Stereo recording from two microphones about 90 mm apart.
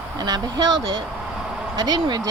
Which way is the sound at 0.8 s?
75° right (ahead or behind).